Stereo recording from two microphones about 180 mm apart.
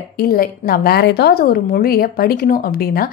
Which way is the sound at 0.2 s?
55° left (ahead or behind).